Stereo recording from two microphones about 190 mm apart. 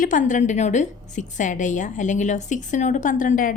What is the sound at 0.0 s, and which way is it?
A woman's voice, 45° left (ahead or behind).